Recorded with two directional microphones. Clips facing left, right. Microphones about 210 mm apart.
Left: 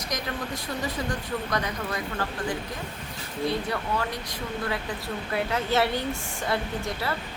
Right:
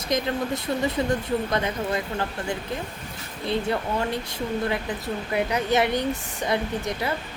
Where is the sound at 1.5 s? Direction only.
25° right (ahead or behind).